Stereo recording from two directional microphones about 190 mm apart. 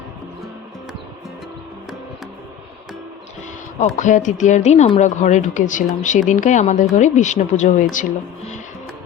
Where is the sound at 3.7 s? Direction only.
40° left (ahead or behind).